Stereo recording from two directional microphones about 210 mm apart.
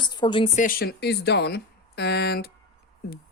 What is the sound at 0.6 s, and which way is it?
Speech, 45° left (ahead or behind).